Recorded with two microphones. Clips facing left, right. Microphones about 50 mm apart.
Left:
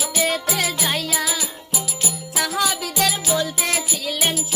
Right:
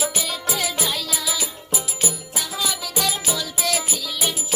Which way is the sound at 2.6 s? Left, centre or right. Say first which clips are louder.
Left 3 dB; left.